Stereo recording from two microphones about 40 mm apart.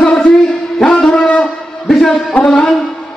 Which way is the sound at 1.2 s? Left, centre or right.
Left.